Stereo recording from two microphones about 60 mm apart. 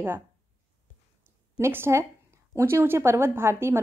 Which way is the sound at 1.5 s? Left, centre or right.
Right.